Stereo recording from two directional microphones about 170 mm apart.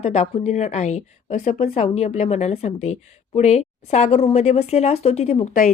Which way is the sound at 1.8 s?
35° left (ahead or behind).